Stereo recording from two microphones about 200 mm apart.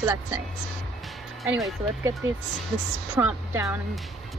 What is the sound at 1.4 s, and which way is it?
Speech, centre (ahead or behind).